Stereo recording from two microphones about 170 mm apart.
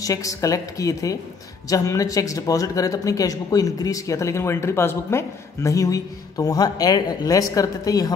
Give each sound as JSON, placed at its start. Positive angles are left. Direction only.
{"t": 0.0, "sound": "speech", "side_deg": 20}